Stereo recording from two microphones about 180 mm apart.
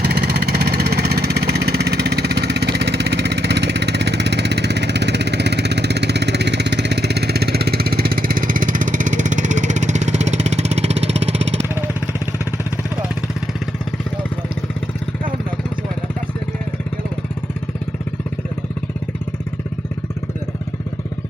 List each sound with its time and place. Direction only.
0.0 s vehicle: 65° right (ahead or behind); by 11.3 s 35° right (ahead or behind)